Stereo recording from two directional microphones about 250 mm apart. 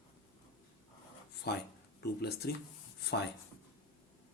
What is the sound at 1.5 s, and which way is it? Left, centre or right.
Speech, left.